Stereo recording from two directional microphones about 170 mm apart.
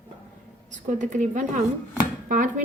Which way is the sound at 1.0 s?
45° right (ahead or behind).